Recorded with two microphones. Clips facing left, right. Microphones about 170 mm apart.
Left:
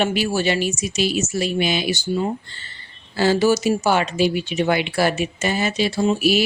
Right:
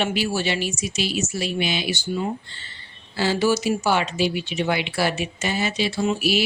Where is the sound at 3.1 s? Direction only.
45° left (ahead or behind).